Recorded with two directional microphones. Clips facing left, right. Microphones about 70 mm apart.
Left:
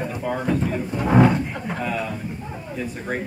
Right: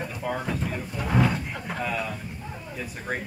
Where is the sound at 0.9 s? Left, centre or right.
Left.